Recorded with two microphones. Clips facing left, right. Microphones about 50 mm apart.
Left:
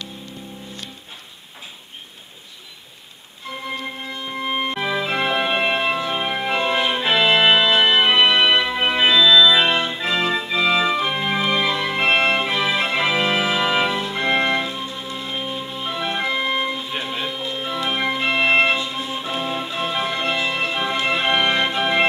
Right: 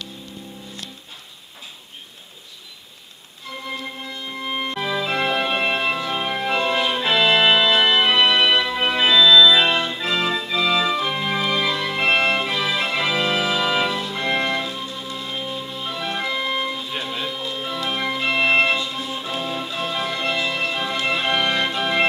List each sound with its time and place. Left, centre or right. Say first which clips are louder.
3.6 s organ: left 2 dB; centre